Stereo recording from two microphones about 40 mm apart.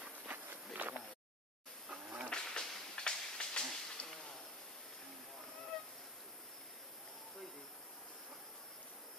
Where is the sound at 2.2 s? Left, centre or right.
Left.